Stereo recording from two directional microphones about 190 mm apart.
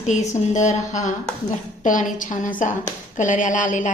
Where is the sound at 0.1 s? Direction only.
40° left (ahead or behind).